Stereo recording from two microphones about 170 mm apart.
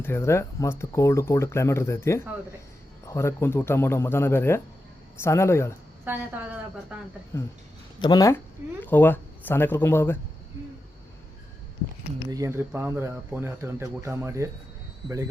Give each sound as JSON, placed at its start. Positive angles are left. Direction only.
{"t": 0.0, "sound": "speech", "side_deg": 15}
{"t": 6.1, "sound": "speech", "side_deg": -10}
{"t": 7.3, "sound": "speech", "side_deg": 15}
{"t": 12.3, "sound": "speech", "side_deg": -15}